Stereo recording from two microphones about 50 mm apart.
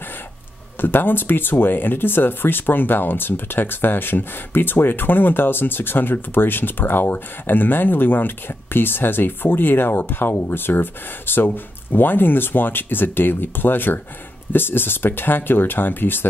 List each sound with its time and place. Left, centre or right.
0.7 s speech: left